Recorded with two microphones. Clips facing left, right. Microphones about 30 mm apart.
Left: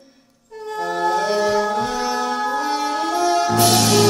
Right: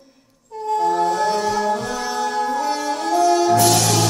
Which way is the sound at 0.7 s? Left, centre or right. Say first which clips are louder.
Right 5 dB; centre.